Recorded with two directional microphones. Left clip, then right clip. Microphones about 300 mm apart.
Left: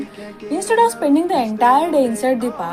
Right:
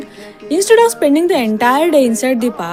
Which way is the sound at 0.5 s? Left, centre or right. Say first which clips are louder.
Right 6 dB; right.